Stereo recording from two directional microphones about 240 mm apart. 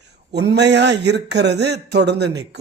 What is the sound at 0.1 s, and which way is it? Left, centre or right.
A man's voice, right.